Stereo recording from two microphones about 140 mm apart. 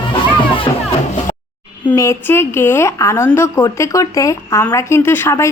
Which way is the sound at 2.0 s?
20° left (ahead or behind).